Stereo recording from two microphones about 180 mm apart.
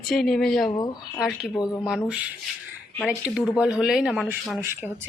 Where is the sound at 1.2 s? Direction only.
Centre (ahead or behind).